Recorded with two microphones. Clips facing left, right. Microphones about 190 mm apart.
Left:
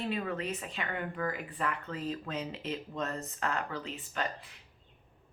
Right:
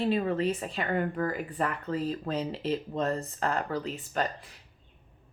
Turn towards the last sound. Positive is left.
turn(degrees=-40)  # may be behind; listen again after turning